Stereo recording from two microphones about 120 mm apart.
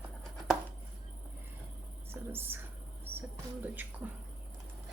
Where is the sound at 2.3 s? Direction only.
15° right (ahead or behind).